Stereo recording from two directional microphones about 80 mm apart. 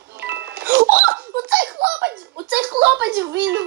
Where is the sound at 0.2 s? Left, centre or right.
Centre.